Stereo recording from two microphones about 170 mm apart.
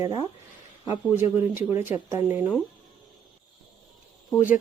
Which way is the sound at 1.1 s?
15° right (ahead or behind).